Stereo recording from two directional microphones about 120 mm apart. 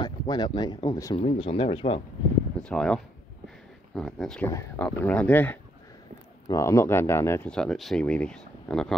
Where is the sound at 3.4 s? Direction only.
5° left (ahead or behind).